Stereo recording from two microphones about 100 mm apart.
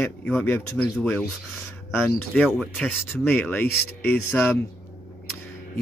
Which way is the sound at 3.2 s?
15° left (ahead or behind).